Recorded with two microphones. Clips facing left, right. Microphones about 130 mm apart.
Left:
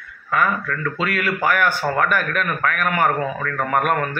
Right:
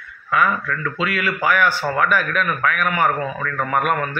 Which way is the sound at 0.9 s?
45° left (ahead or behind).